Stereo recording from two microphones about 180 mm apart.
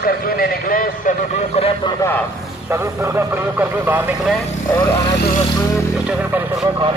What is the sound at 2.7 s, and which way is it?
Speech, 15° right (ahead or behind).